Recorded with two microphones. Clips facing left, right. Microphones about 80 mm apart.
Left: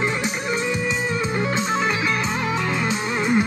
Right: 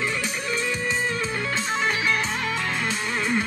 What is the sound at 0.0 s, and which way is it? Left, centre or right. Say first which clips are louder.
Music: left 4 dB; left.